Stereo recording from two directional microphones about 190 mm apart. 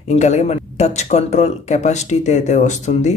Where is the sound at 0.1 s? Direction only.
35° left (ahead or behind).